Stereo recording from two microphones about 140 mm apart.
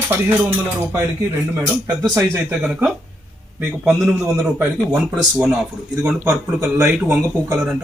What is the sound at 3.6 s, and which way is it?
Speech, 20° right (ahead or behind).